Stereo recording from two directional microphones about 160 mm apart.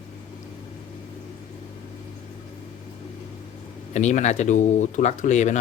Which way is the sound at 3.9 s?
45° left (ahead or behind).